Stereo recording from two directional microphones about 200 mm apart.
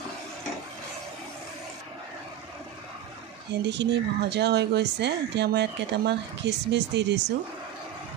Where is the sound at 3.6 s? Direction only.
60° right (ahead or behind).